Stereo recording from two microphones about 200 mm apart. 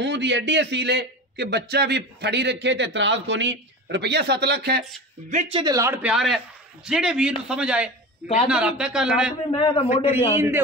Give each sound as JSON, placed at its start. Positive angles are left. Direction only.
{"t": 0.0, "sound": "a man's voice", "side_deg": -60}
{"t": 5.3, "sound": "speech", "side_deg": -35}
{"t": 5.6, "sound": "a man's voice", "side_deg": -15}
{"t": 6.1, "sound": "a man's voice", "side_deg": 0}
{"t": 9.5, "sound": "a man's voice", "side_deg": 25}
{"t": 10.1, "sound": "a man's voice", "side_deg": -10}